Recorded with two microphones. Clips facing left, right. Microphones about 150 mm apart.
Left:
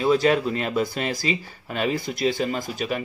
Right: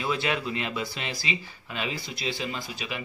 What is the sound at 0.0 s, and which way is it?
Speech, 40° left (ahead or behind).